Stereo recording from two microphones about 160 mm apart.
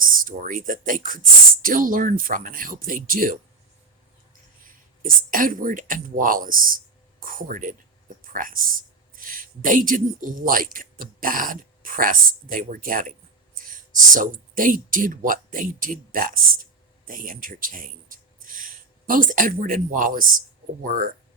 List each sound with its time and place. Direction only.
0.2 s speech: 60° right (ahead or behind)
5.0 s speech: 60° right (ahead or behind)